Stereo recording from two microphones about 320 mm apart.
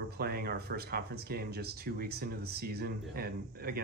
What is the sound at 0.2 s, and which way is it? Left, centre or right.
Speech, right.